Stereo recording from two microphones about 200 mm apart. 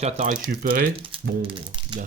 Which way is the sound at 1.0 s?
25° right (ahead or behind).